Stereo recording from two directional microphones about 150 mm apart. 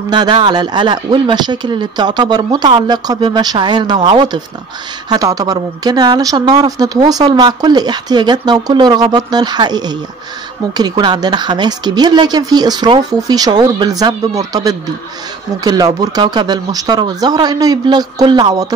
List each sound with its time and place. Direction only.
0.1 s a woman's voice: 30° right (ahead or behind)